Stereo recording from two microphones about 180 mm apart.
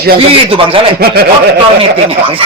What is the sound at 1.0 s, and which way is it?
Speech, 60° right (ahead or behind).